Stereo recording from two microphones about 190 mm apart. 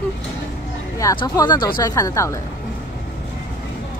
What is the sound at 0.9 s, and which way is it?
Speech, 20° left (ahead or behind).